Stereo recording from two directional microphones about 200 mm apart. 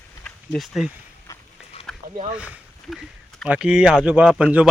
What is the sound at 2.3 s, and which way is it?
Speech, 5° right (ahead or behind).